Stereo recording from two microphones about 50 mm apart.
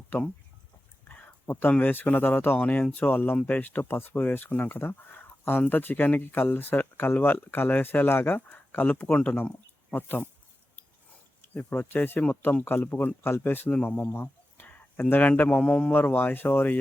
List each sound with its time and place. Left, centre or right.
1.0 s a sound: left
1.8 s speech: left
11.5 s speech: left
14.1 s bird: left
15.1 s speech: left
15.9 s speech: left